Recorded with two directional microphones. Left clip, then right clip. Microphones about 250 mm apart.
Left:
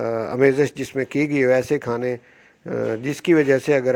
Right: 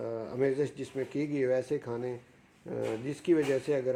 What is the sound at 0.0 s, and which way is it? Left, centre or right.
Speech, left.